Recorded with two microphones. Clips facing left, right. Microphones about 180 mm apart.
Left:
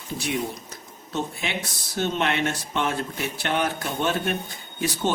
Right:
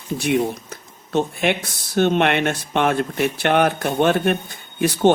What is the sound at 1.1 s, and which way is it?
Speech, 60° right (ahead or behind).